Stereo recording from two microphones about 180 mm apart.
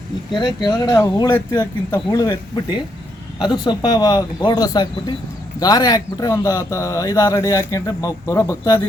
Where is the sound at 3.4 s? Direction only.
25° left (ahead or behind).